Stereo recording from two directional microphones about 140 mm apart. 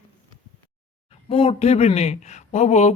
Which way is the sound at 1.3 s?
45° left (ahead or behind).